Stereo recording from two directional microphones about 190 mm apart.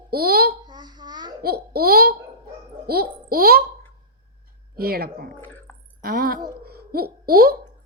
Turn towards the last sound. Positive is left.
turn(degrees=-50)  # may be behind; listen again after turning